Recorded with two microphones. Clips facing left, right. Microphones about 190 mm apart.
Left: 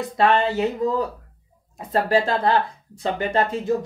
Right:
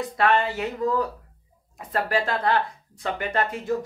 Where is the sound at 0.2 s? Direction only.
25° left (ahead or behind).